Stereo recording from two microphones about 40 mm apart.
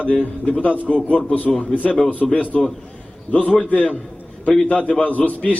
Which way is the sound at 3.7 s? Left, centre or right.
Left.